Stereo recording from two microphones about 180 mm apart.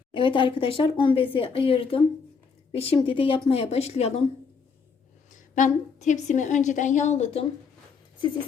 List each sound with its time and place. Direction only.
0.1 s a woman's voice: 25° left (ahead or behind)
5.3 s a woman's voice: 45° left (ahead or behind)